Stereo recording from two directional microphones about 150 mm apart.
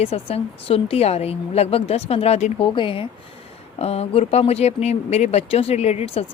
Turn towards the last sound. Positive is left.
turn(degrees=40)  # may be behind; listen again after turning